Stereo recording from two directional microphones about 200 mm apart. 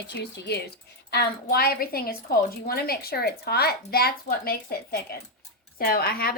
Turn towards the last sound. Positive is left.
turn(degrees=50)  # may be behind; listen again after turning